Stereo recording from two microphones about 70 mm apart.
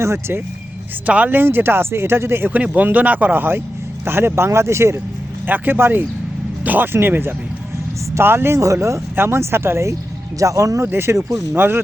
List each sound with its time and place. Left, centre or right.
0.0 s speech: right
1.0 s speech: right
2.7 s speech: right
8.5 s speech: right
10.4 s speech: right
10.8 s speech: right